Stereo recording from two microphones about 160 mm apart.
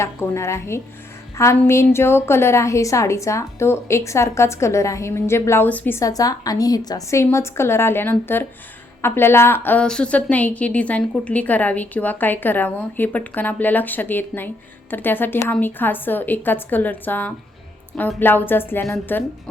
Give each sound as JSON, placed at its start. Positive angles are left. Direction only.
{"t": 0.0, "sound": "a woman's voice", "side_deg": 15}